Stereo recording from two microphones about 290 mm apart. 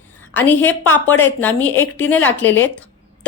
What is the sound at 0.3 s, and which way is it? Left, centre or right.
A woman's voice, centre.